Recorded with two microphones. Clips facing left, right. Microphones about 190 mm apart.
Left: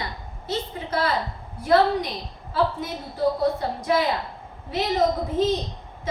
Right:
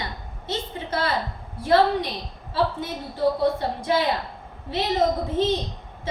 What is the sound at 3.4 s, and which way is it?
A woman's voice, 30° right (ahead or behind).